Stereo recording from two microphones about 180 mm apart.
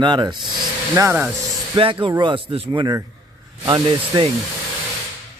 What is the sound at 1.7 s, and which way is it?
Speech, 30° right (ahead or behind).